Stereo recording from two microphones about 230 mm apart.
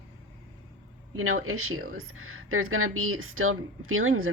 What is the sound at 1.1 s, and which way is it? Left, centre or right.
Speech, right.